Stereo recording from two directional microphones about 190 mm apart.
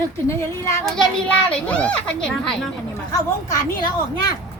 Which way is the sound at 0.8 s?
5° left (ahead or behind).